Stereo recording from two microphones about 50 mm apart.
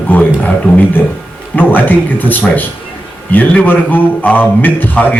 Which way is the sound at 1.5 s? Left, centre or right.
Left.